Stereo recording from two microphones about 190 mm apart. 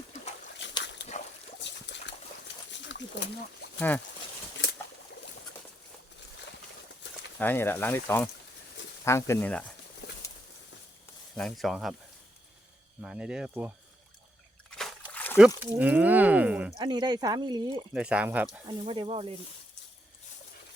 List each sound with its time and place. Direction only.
0.6 s a sound: 70° left (ahead or behind)
3.8 s speech: 10° left (ahead or behind)
7.3 s speech: 10° left (ahead or behind)
11.3 s speech: centre (ahead or behind)
13.0 s speech: 5° right (ahead or behind)
15.1 s a sound: 10° left (ahead or behind)
15.4 s speech: 10° right (ahead or behind)
16.7 s speech: 20° right (ahead or behind)
17.9 s speech: 5° right (ahead or behind)
18.7 s speech: 30° right (ahead or behind)